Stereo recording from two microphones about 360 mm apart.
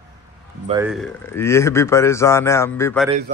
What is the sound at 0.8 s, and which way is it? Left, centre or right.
Speech, centre.